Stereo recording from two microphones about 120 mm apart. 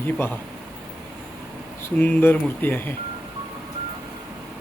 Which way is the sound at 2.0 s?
15° left (ahead or behind).